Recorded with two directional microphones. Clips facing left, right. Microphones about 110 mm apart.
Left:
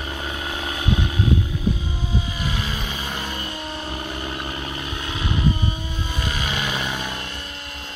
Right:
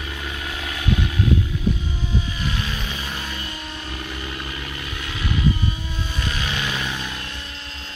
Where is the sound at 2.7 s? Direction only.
25° left (ahead or behind).